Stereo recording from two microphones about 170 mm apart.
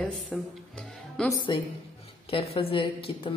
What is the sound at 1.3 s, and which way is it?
A woman's voice, 30° left (ahead or behind).